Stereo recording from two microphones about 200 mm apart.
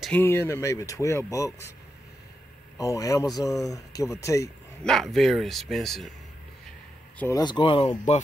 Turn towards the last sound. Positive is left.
turn(degrees=25)  # may be behind; listen again after turning